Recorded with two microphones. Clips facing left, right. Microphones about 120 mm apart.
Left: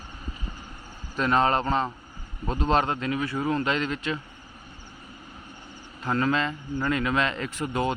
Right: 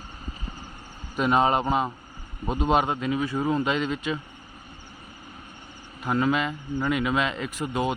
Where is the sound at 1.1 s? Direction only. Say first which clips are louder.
Right 1 dB; 10° right (ahead or behind).